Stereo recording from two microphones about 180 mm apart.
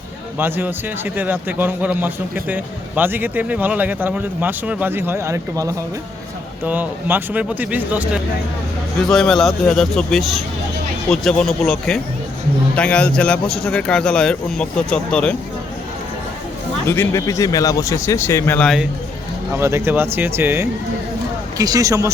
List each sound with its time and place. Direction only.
0.3 s a man's voice: 10° right (ahead or behind)
9.0 s a man's voice: centre (ahead or behind)
16.8 s speech: 15° left (ahead or behind)
19.5 s a man's voice: 15° right (ahead or behind)